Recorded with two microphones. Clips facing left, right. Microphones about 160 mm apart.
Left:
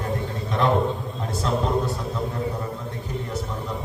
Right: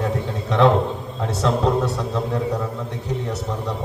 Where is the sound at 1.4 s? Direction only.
75° right (ahead or behind).